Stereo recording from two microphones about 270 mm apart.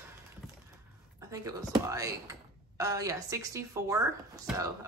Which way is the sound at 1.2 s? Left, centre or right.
Centre.